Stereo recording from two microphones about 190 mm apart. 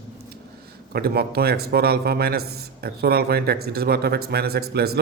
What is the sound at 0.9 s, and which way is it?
Speech, 55° right (ahead or behind).